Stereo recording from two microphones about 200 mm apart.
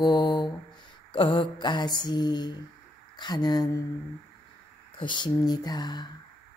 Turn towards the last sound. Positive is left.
turn(degrees=20)  # may be behind; listen again after turning